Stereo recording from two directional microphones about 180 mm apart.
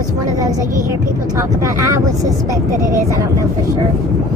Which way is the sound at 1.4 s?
15° right (ahead or behind).